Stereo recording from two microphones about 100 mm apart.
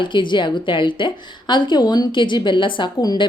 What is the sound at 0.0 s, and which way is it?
A woman's voice, 55° left (ahead or behind).